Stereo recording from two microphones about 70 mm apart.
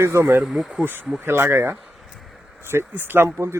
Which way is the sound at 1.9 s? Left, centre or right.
Centre.